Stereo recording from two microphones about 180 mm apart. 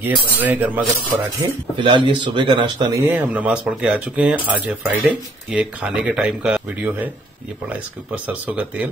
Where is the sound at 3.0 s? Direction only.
10° right (ahead or behind).